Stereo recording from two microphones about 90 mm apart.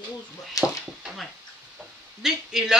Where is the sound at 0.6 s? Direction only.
40° left (ahead or behind).